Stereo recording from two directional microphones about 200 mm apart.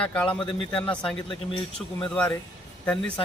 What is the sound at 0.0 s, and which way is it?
Speech, 5° left (ahead or behind).